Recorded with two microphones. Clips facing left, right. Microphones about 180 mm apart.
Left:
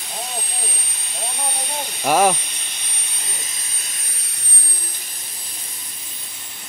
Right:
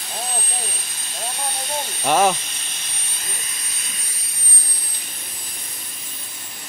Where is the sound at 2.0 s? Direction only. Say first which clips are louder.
Left 1 dB; 10° left (ahead or behind).